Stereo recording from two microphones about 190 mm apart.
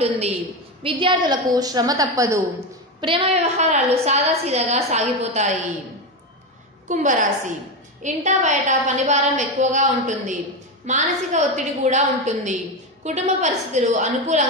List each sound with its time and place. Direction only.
0.8 s a woman's voice: 25° right (ahead or behind)
3.0 s a woman's voice: 30° right (ahead or behind)
6.9 s a woman's voice: 40° right (ahead or behind)